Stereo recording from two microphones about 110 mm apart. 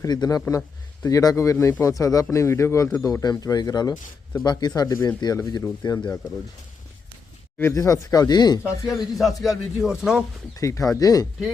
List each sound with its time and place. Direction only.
0.0 s speech: 35° left (ahead or behind)
7.6 s speech: 30° left (ahead or behind)
8.6 s a man's voice: centre (ahead or behind)
10.6 s speech: 30° left (ahead or behind)